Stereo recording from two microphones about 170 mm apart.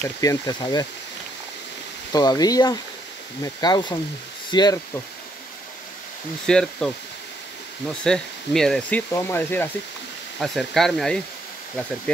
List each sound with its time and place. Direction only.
0.0 s speech: 20° left (ahead or behind)
2.1 s speech: 20° left (ahead or behind)
6.4 s speech: 5° left (ahead or behind)
8.0 s speech: 5° left (ahead or behind)
9.1 s speech: 15° left (ahead or behind)
10.4 s speech: centre (ahead or behind)